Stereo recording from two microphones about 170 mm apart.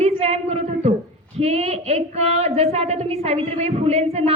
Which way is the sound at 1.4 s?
35° right (ahead or behind).